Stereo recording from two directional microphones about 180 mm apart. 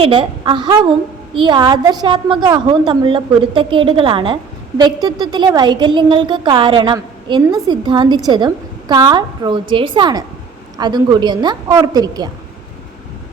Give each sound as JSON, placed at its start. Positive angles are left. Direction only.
{"t": 0.0, "sound": "a woman's voice", "side_deg": -30}